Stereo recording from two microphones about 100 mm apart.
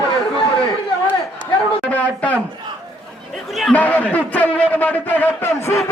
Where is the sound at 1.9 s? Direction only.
15° left (ahead or behind).